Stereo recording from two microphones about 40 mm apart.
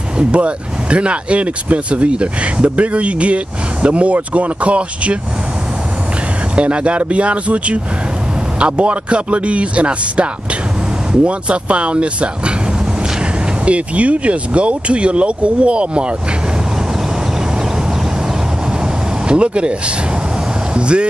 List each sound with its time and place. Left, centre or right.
0.2 s speech: right
6.5 s speech: right
13.7 s speech: right
19.2 s speech: right
20.7 s vehicle: right